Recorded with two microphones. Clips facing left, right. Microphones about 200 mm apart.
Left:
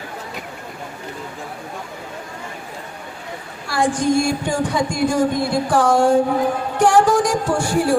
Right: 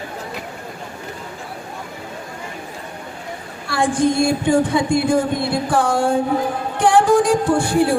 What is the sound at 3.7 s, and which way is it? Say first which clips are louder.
Heart murmur: right 1 dB; 45° left (ahead or behind).